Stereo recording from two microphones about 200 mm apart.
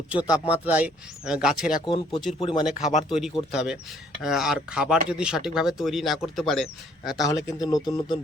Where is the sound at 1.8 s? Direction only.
25° left (ahead or behind).